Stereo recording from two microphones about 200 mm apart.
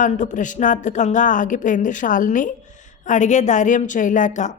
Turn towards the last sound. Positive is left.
turn(degrees=40)  # may be behind; listen again after turning